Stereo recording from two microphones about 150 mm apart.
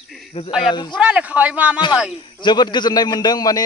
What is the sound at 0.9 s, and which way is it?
Speech, 10° right (ahead or behind).